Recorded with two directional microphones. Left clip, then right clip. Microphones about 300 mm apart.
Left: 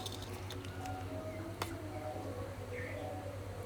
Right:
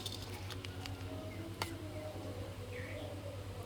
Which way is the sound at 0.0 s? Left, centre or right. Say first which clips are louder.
Left 1 dB; centre.